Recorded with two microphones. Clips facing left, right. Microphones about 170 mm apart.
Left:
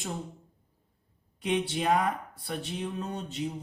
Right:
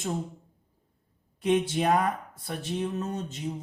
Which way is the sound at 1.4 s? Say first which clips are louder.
Right 4 dB; 45° right (ahead or behind).